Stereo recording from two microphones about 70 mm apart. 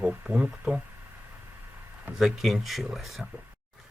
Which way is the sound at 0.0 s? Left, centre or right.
Centre.